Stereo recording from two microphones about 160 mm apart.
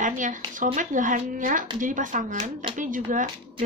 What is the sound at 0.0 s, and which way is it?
Speech, 55° right (ahead or behind).